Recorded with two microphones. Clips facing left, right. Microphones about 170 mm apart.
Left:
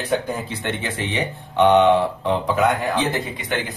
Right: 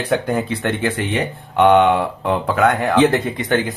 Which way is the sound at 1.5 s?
50° right (ahead or behind).